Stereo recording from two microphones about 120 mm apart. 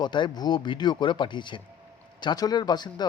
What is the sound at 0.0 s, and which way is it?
Speech, 40° left (ahead or behind).